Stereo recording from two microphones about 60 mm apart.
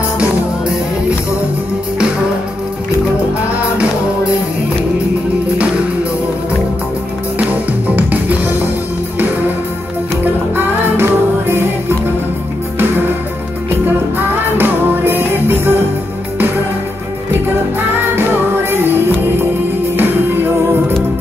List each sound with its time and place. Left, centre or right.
7.9 s music: right
10.5 s music: right
14.6 s music: right
18.1 s music: right